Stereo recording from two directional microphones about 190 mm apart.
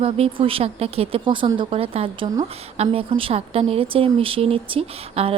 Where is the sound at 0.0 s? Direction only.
30° right (ahead or behind).